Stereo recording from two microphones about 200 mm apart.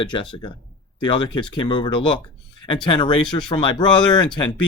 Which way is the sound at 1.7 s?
25° left (ahead or behind).